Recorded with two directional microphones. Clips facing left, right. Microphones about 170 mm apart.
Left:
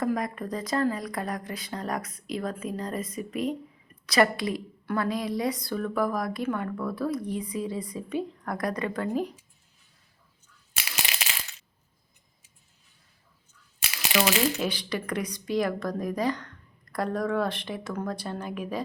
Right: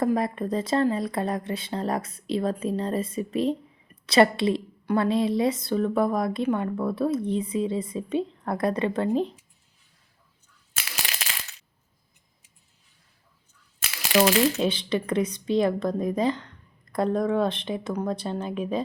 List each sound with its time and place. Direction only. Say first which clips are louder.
0.0 s a woman's voice: right 4 dB; 30° right (ahead or behind)
10.9 s a sound: left 1 dB; centre (ahead or behind)
14.6 s a woman's voice: right 5 dB; 25° right (ahead or behind)